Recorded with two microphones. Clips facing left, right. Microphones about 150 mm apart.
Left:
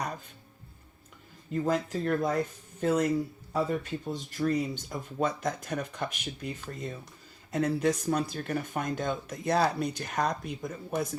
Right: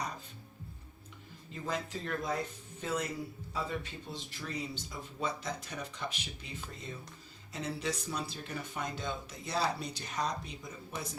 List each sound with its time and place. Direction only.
1.5 s speech: 50° left (ahead or behind)